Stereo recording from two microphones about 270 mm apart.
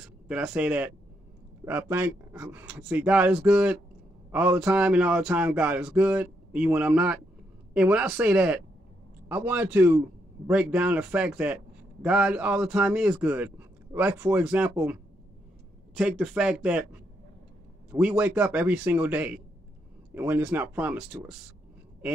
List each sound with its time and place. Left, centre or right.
0.3 s a man's voice: centre
17.9 s a man's voice: centre